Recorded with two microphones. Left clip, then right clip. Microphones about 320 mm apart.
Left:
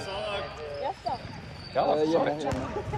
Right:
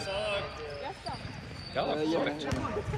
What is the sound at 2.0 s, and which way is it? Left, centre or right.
Speech, left.